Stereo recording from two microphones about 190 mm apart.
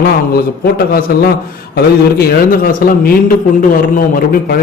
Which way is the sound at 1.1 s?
55° left (ahead or behind).